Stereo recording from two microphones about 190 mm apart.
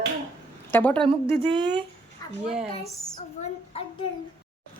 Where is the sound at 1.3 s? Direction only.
25° right (ahead or behind).